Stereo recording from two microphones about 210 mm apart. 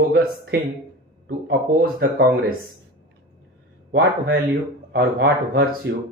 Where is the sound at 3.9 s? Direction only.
50° right (ahead or behind).